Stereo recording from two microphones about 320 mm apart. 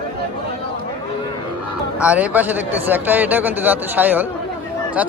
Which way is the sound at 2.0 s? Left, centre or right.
Centre.